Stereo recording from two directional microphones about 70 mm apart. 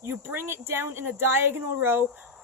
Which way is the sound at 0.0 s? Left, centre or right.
Right.